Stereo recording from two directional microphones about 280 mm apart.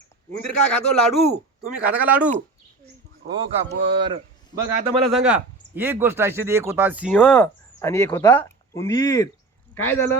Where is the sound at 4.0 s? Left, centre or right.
Centre.